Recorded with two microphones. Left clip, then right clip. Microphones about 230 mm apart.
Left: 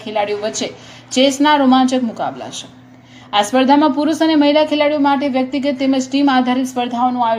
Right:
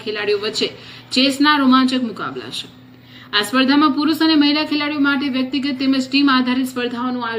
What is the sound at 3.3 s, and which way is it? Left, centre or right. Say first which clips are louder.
A woman's voice: left 4 dB; centre.